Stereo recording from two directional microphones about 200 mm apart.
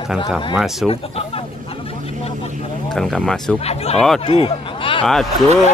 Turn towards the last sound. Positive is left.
turn(degrees=0)  # may be behind; listen again after turning